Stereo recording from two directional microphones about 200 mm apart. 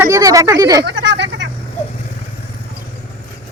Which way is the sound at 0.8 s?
55° right (ahead or behind).